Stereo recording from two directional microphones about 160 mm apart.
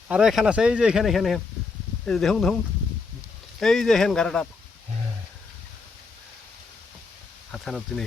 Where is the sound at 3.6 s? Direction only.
Centre (ahead or behind).